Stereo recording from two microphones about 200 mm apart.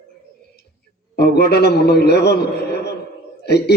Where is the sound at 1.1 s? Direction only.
55° left (ahead or behind).